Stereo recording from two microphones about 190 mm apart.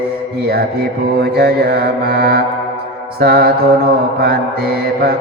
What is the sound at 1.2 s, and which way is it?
Mantra, 55° right (ahead or behind).